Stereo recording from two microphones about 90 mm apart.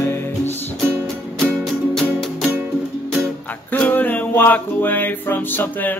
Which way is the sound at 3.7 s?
20° left (ahead or behind).